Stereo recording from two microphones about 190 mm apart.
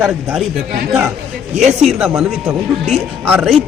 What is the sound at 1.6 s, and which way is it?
Speech, 35° right (ahead or behind).